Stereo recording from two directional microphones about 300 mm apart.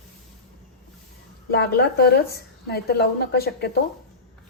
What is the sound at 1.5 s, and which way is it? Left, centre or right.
Speech, left.